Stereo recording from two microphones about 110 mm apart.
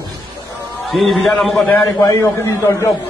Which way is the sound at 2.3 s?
25° left (ahead or behind).